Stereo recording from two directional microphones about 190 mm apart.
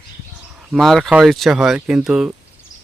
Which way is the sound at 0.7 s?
Centre (ahead or behind).